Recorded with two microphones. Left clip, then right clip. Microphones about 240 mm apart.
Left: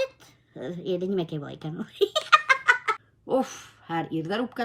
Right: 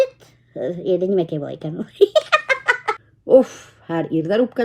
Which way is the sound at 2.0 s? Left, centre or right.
Centre.